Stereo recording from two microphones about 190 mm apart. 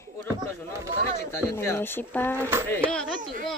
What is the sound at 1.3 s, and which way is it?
Speech, 15° left (ahead or behind).